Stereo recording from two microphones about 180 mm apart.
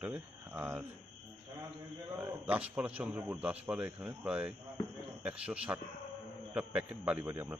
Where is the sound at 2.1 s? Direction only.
10° right (ahead or behind).